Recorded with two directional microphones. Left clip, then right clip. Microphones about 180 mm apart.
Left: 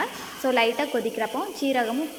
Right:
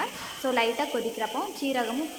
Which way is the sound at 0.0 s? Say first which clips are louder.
Left 3 dB; 20° left (ahead or behind).